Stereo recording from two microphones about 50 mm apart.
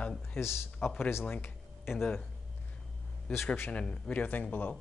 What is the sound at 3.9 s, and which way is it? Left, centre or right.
Speech, left.